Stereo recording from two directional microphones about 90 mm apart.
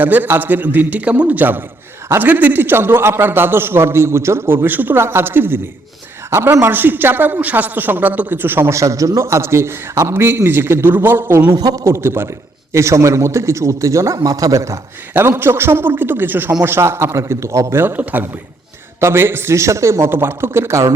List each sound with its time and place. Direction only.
0.0 s a man's voice: 20° right (ahead or behind)
11.4 s a man's voice: 45° right (ahead or behind)
11.9 s a man's voice: 25° right (ahead or behind)